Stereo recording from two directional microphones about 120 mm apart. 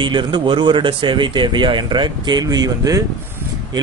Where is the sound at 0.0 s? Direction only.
40° right (ahead or behind).